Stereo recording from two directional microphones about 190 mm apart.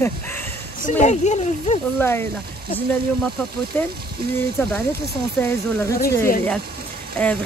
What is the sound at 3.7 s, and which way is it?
Speech, 10° left (ahead or behind).